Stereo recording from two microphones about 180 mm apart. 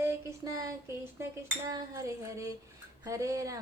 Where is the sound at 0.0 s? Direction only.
15° right (ahead or behind).